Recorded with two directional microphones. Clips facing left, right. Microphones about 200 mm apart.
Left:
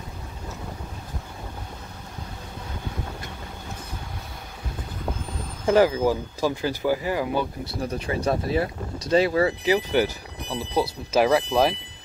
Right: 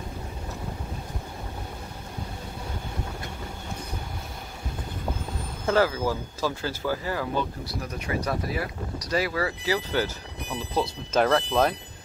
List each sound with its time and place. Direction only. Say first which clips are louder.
5.7 s speech: left 5 dB; 15° left (ahead or behind)
7.8 s speech: left 5 dB; 30° left (ahead or behind); by 11.7 s 5° left (ahead or behind)